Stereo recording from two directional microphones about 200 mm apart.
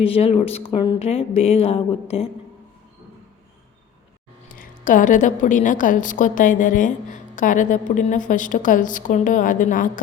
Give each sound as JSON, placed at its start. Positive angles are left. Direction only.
{"t": 0.0, "sound": "speech", "side_deg": 30}
{"t": 4.4, "sound": "a woman's voice", "side_deg": 45}